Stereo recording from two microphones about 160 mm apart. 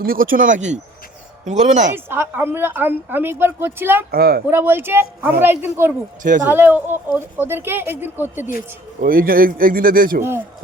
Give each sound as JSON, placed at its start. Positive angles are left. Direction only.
{"t": 0.0, "sound": "a man's voice", "side_deg": -65}
{"t": 2.0, "sound": "speech", "side_deg": -15}
{"t": 4.1, "sound": "speech", "side_deg": -75}
{"t": 4.4, "sound": "speech", "side_deg": -15}
{"t": 9.0, "sound": "a man's voice", "side_deg": -60}